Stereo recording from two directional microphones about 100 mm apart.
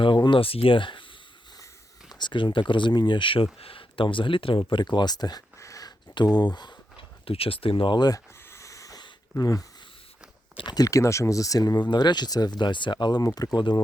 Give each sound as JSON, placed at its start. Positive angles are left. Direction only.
{"t": 0.0, "sound": "speech", "side_deg": 55}
{"t": 2.0, "sound": "speech", "side_deg": 50}
{"t": 6.1, "sound": "speech", "side_deg": 45}
{"t": 7.3, "sound": "speech", "side_deg": 70}
{"t": 8.4, "sound": "a sound", "side_deg": 30}
{"t": 9.4, "sound": "speech", "side_deg": 35}